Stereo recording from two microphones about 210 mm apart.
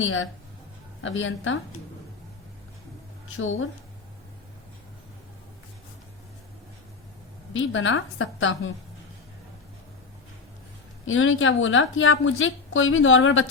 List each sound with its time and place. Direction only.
0.0 s a woman's voice: 70° left (ahead or behind)
3.3 s a woman's voice: 70° left (ahead or behind)
7.5 s a woman's voice: 65° left (ahead or behind)
11.0 s a woman's voice: 70° left (ahead or behind)